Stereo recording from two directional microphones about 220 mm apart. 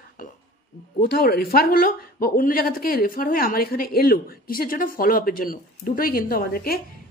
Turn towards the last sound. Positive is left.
turn(degrees=40)  # may be behind; listen again after turning